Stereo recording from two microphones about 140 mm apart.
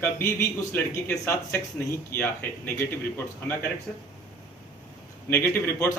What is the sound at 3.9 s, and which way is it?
Speech, 5° left (ahead or behind).